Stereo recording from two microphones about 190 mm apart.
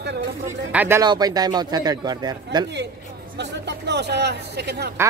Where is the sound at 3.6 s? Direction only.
65° right (ahead or behind).